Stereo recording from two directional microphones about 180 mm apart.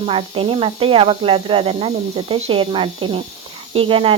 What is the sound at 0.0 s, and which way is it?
Speech, 30° right (ahead or behind).